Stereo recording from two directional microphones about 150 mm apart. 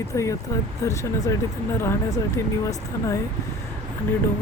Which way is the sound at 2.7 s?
20° left (ahead or behind).